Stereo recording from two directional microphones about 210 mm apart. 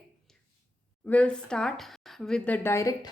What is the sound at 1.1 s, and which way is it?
Speech, 5° left (ahead or behind).